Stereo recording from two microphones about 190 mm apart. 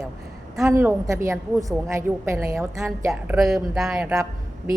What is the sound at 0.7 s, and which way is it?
A woman's voice, 15° right (ahead or behind).